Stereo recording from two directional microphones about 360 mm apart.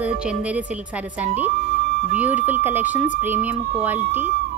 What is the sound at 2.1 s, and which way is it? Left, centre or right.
Speech, centre.